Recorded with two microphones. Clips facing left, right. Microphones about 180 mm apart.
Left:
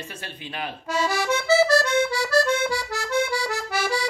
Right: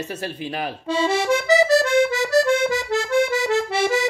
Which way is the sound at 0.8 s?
30° right (ahead or behind).